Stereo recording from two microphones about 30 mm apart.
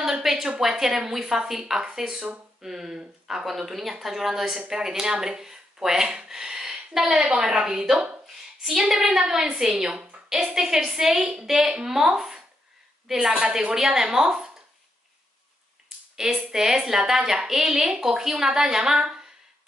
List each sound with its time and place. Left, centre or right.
0.0 s speech: centre
6.2 s a sound: centre
7.1 s a woman's voice: right
8.6 s speech: centre
9.6 s a woman's voice: right
10.5 s speech: centre
11.5 s a woman's voice: right
16.5 s speech: centre